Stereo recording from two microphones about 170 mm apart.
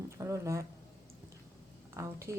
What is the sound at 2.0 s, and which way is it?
Speech, 15° right (ahead or behind).